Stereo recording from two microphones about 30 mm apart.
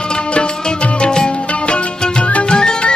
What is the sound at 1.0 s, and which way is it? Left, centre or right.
Music, left.